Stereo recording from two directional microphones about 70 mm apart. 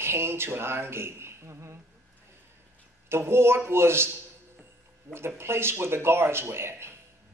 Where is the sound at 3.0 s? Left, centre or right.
Right.